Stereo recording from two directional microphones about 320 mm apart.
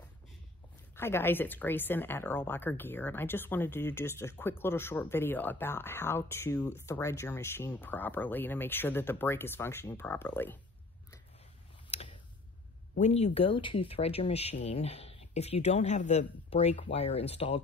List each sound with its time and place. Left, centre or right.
0.9 s a woman's voice: centre
11.9 s a sound: centre
12.9 s speech: left